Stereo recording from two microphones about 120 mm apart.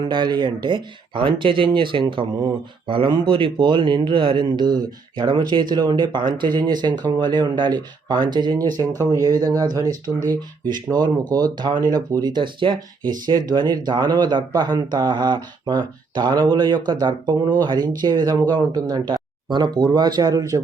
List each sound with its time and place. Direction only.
0.1 s speech: 40° right (ahead or behind)
10.9 s speech: 35° right (ahead or behind)